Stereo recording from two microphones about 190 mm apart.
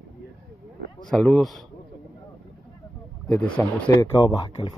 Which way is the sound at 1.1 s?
5° left (ahead or behind).